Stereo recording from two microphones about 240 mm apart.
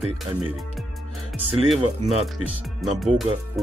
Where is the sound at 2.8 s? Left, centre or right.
Centre.